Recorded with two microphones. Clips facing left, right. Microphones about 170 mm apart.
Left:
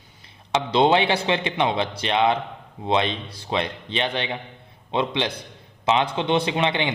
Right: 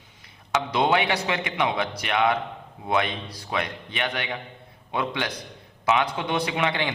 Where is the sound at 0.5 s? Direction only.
25° left (ahead or behind).